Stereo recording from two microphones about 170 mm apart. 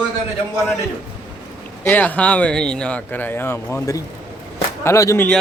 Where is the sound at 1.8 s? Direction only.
10° left (ahead or behind).